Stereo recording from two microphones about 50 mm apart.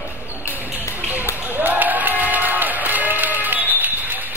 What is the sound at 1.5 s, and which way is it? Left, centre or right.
Music, right.